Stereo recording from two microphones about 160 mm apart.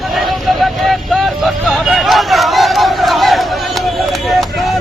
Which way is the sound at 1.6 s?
Centre (ahead or behind).